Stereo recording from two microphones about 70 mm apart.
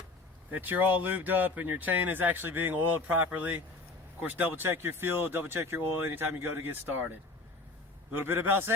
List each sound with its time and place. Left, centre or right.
0.5 s speech: right